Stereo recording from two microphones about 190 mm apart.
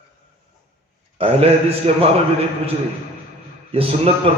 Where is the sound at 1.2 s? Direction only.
30° right (ahead or behind).